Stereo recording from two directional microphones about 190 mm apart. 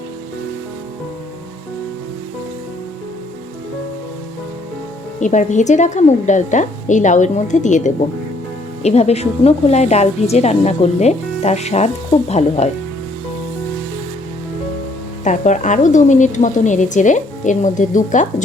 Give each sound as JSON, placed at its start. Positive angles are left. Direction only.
{"t": 5.2, "sound": "a woman's voice", "side_deg": 40}
{"t": 15.2, "sound": "a woman's voice", "side_deg": 40}